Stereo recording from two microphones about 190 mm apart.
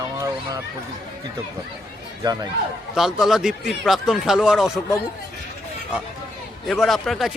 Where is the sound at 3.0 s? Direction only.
Centre (ahead or behind).